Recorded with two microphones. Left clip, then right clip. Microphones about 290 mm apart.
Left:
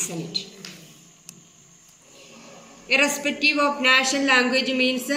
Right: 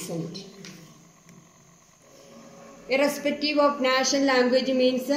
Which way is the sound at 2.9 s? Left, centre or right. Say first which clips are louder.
Left 3 dB; right.